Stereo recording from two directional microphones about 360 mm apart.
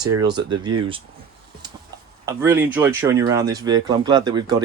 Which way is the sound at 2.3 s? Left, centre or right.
Centre.